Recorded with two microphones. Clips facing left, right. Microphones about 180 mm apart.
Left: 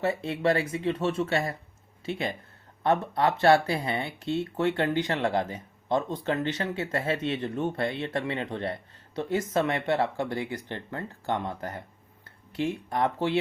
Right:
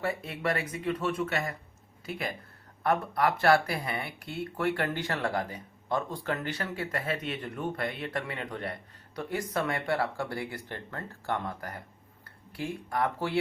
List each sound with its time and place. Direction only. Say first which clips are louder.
0.0 s speech: left 5 dB; 25° left (ahead or behind)